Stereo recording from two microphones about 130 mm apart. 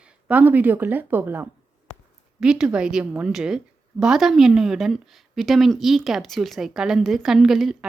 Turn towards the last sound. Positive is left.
turn(degrees=0)  # may be behind; listen again after turning